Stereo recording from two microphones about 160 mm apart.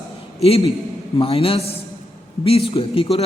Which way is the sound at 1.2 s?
35° left (ahead or behind).